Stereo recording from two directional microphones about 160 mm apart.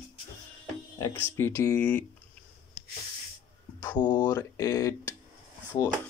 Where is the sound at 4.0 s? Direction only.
25° left (ahead or behind).